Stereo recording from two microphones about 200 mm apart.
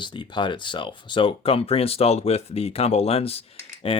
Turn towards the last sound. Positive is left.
turn(degrees=30)  # may be behind; listen again after turning